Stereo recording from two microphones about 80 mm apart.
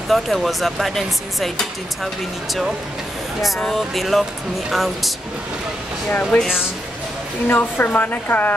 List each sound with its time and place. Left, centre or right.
0.1 s speech: centre
3.6 s speech: centre
6.0 s speech: centre
7.5 s speech: left